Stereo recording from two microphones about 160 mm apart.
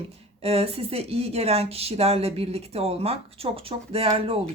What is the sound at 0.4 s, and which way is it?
Speech, 40° right (ahead or behind).